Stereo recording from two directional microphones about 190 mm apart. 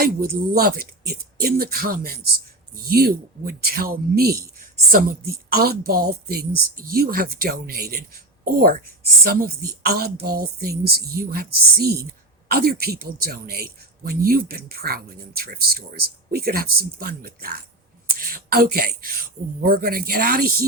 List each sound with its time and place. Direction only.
0.0 s speech: 50° right (ahead or behind)